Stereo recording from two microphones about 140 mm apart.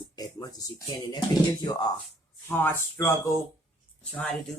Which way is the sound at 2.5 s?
15° left (ahead or behind).